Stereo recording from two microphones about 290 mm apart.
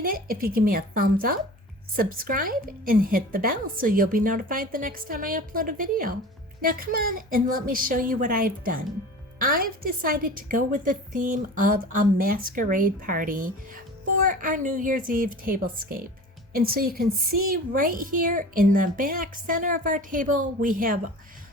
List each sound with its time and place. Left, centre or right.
0.0 s a child's voice: right